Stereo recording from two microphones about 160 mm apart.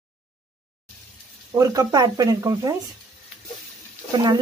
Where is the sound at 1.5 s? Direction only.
20° right (ahead or behind).